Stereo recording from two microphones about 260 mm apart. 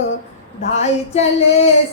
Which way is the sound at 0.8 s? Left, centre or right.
Left.